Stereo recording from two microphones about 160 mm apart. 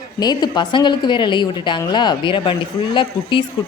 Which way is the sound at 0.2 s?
25° left (ahead or behind).